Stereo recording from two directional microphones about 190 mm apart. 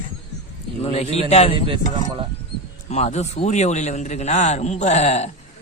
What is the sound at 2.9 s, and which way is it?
A man's voice, 35° left (ahead or behind).